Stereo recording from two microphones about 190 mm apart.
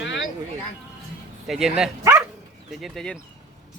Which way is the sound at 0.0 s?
75° left (ahead or behind).